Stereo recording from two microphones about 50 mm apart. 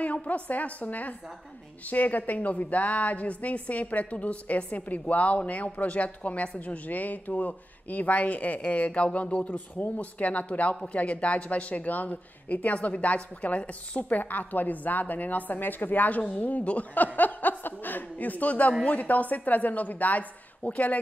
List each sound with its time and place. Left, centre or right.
0.0 s a woman's voice: left